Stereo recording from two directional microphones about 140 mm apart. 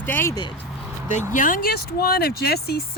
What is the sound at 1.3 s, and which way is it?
Speech, 70° left (ahead or behind).